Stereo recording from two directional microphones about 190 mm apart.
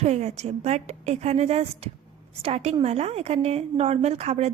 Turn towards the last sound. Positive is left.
turn(degrees=-35)  # may be behind; listen again after turning